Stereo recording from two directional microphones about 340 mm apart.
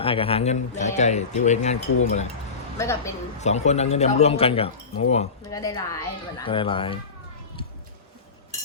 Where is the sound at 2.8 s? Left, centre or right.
Centre.